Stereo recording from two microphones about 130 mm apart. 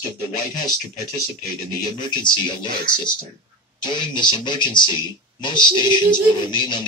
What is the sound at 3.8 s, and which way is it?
Speech, 35° left (ahead or behind).